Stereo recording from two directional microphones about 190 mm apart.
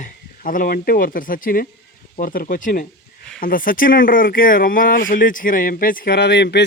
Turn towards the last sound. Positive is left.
turn(degrees=65)  # may be behind; listen again after turning